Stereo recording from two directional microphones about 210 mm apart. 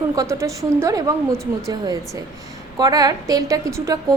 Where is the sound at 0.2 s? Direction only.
15° right (ahead or behind).